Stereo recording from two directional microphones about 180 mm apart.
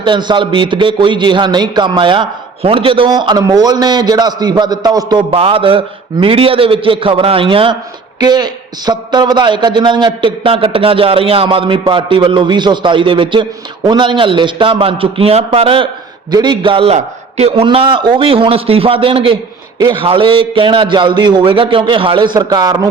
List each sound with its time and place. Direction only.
0.0 s a man's voice: 25° right (ahead or behind)